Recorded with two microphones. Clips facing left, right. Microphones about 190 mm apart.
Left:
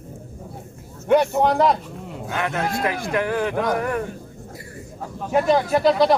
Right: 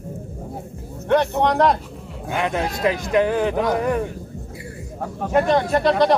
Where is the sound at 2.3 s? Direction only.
15° right (ahead or behind).